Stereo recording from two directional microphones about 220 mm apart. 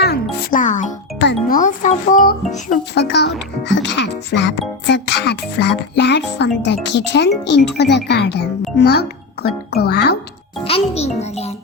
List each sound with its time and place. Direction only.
0.0 s music: 40° left (ahead or behind)
1.2 s music: 50° left (ahead or behind)
1.5 s a child's voice: 35° left (ahead or behind)
10.6 s a child's voice: 25° left (ahead or behind)